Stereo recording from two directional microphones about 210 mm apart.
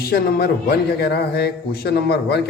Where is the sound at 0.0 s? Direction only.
50° left (ahead or behind).